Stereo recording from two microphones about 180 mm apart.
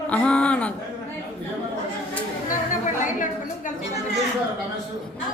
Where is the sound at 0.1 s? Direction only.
5° left (ahead or behind).